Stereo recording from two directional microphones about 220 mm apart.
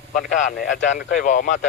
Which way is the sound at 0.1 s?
35° left (ahead or behind).